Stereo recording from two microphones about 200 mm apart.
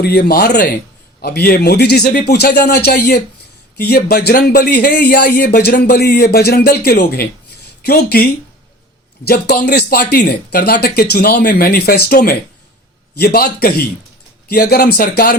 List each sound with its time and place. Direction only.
0.0 s speech: 55° left (ahead or behind)